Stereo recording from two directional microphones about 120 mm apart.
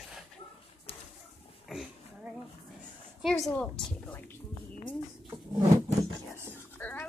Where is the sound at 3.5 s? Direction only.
10° left (ahead or behind).